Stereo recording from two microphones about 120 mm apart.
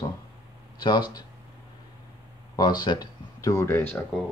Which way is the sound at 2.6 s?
35° left (ahead or behind).